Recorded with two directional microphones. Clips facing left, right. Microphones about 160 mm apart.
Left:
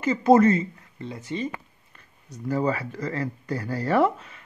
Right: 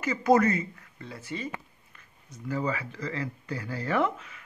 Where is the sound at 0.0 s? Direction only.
25° left (ahead or behind).